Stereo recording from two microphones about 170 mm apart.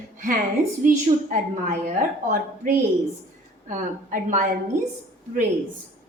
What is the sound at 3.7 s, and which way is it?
Speech, 50° right (ahead or behind).